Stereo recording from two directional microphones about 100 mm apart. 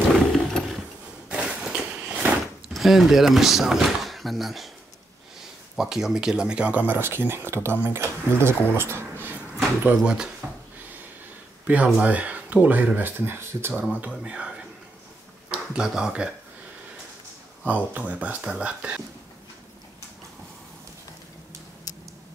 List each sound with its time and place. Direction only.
0.1 s a sound: 5° left (ahead or behind)
1.3 s a sound: 10° right (ahead or behind)
2.7 s speech: centre (ahead or behind)
5.8 s speech: 5° right (ahead or behind); by 9.4 s 25° right (ahead or behind)
9.8 s speech: 10° right (ahead or behind)
11.6 s speech: 15° right (ahead or behind)
14.0 s speech: 10° right (ahead or behind)
15.5 s speech: 5° right (ahead or behind)
17.9 s speech: 15° right (ahead or behind)